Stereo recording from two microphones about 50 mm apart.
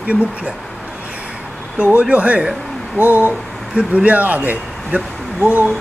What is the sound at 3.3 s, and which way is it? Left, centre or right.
Speech, right.